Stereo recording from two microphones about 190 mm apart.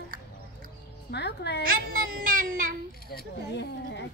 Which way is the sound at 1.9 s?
45° right (ahead or behind).